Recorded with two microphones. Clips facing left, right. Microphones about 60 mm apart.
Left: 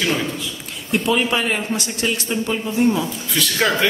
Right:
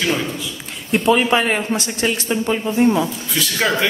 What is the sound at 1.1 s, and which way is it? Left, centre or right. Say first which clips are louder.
A man's voice: right 5 dB; right.